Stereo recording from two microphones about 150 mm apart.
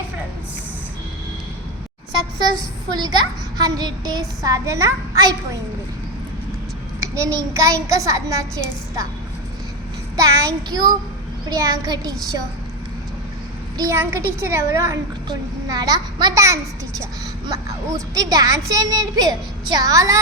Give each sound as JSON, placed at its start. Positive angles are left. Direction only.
{"t": 3.6, "sound": "a woman's voice", "side_deg": -25}
{"t": 7.0, "sound": "a woman's voice", "side_deg": -20}
{"t": 10.2, "sound": "a woman's voice", "side_deg": -20}
{"t": 13.7, "sound": "a woman's voice", "side_deg": -20}